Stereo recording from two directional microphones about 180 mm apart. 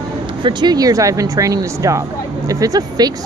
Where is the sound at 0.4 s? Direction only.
25° right (ahead or behind).